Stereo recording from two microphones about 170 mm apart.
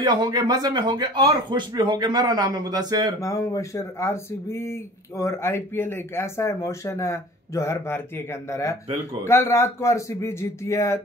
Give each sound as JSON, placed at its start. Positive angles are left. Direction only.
{"t": 0.0, "sound": "speech", "side_deg": -25}
{"t": 3.2, "sound": "speech", "side_deg": 20}